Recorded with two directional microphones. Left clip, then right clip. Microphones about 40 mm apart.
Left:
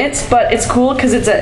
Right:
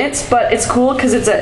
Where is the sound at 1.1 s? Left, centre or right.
Left.